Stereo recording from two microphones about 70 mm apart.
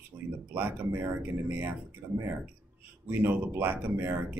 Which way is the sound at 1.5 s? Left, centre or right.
Right.